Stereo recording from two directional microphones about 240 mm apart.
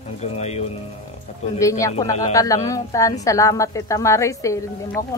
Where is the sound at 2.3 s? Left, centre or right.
Centre.